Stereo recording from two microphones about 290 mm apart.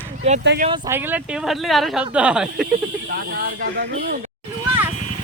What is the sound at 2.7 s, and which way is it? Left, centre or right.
Speech, right.